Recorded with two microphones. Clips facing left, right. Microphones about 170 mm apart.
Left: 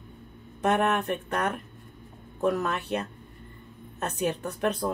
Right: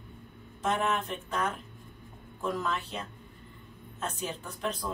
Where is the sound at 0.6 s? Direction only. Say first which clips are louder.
Left 5 dB; 65° left (ahead or behind).